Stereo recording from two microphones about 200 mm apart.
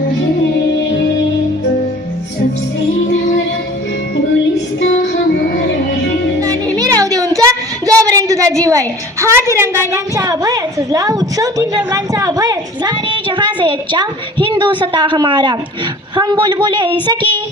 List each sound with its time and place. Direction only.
6.7 s a woman's voice: 15° right (ahead or behind)